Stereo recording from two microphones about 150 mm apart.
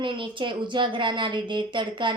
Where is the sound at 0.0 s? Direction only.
35° right (ahead or behind).